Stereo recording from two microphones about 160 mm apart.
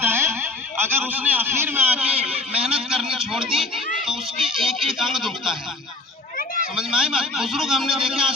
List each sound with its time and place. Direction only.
0.0 s a man's voice: 15° right (ahead or behind)
6.7 s a man's voice: 5° right (ahead or behind)